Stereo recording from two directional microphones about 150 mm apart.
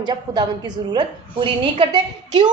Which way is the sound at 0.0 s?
30° right (ahead or behind).